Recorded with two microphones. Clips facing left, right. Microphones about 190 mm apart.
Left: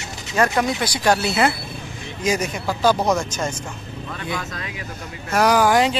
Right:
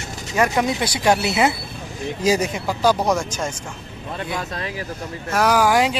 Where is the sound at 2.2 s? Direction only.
30° right (ahead or behind).